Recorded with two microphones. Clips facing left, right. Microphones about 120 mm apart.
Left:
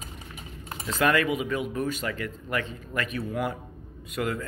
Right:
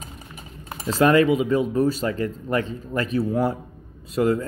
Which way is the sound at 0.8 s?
30° right (ahead or behind).